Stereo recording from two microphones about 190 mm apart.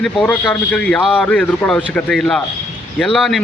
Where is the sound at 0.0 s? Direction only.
5° left (ahead or behind).